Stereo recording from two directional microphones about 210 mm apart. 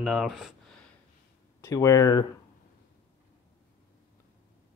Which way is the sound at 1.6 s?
15° left (ahead or behind).